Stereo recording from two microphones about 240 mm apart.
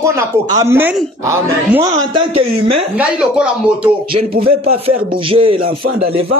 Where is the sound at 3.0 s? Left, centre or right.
Centre.